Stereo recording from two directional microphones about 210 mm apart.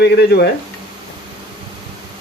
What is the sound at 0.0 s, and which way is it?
Speech, 50° left (ahead or behind).